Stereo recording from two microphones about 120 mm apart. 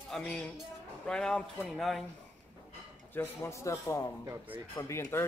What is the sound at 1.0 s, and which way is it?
Speech, 5° left (ahead or behind).